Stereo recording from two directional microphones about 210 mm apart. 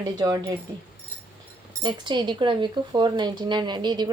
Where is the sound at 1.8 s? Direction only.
20° right (ahead or behind).